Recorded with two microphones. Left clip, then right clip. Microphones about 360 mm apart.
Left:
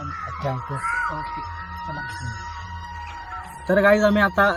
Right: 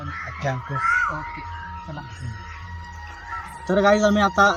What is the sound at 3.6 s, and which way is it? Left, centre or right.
Speech, centre.